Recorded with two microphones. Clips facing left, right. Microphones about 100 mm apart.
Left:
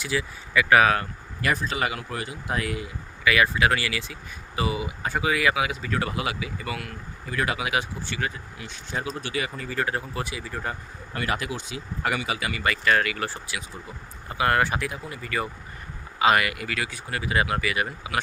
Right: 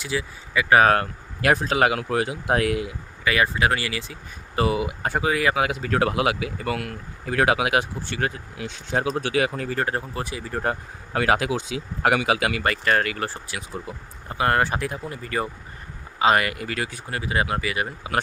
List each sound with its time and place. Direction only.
0.0 s speech: 25° right (ahead or behind)
0.9 s speech: 70° right (ahead or behind); by 2.9 s 85° right
3.2 s speech: 30° right (ahead or behind)
4.5 s speech: 60° right (ahead or behind)
5.2 s speech: 35° right (ahead or behind)
5.6 s speech: 65° right (ahead or behind); by 6.5 s 85° right
6.6 s speech: 55° right (ahead or behind)
7.3 s speech: 90° right
9.7 s speech: 40° right (ahead or behind)
10.6 s speech: 75° right (ahead or behind)
12.6 s speech: 40° right (ahead or behind)